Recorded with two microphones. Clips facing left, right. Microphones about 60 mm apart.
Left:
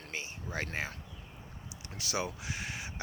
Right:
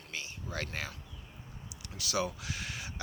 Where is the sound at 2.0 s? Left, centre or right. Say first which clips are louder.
Right 2 dB; left.